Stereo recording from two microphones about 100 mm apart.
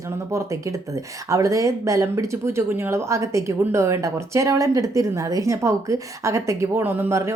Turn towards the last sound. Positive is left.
turn(degrees=-25)  # may be behind; listen again after turning